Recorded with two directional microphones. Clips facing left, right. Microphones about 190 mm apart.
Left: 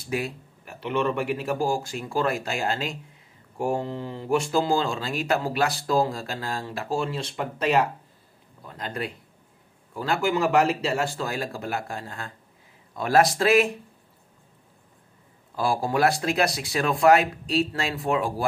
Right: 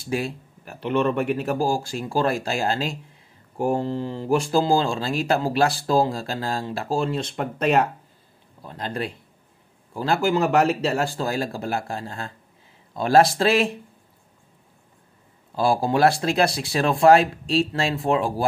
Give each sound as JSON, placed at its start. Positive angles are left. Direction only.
{"t": 0.1, "sound": "speech", "side_deg": -35}
{"t": 7.3, "sound": "speech", "side_deg": -50}
{"t": 8.6, "sound": "speech", "side_deg": -30}
{"t": 15.5, "sound": "speech", "side_deg": -30}